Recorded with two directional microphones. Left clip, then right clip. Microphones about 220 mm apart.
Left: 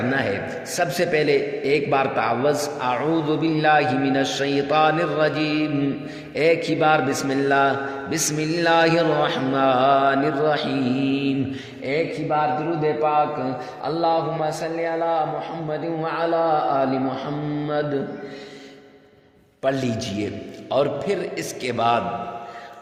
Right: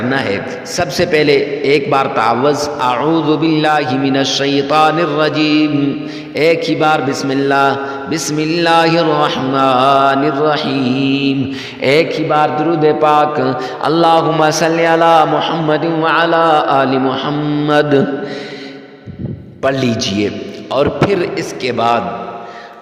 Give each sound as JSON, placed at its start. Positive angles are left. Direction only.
{"t": 0.1, "sound": "a man's voice", "side_deg": -30}
{"t": 11.8, "sound": "a man's voice", "side_deg": -50}
{"t": 19.6, "sound": "a man's voice", "side_deg": -35}